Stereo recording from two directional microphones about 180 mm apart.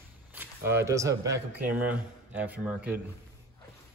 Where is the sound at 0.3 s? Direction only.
10° right (ahead or behind).